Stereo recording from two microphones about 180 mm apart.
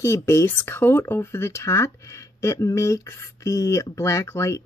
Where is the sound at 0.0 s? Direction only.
15° left (ahead or behind).